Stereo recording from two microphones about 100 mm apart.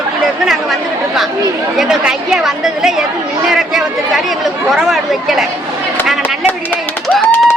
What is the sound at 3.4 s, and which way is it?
Chatter, 5° right (ahead or behind).